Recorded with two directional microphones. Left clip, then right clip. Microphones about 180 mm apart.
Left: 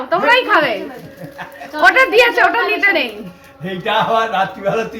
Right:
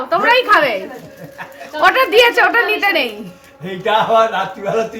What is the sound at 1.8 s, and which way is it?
A woman's voice, 25° right (ahead or behind).